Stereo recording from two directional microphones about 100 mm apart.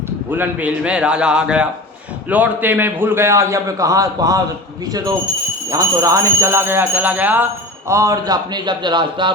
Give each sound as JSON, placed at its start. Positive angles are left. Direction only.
{"t": 0.3, "sound": "a man's voice", "side_deg": -15}
{"t": 7.9, "sound": "speech", "side_deg": -35}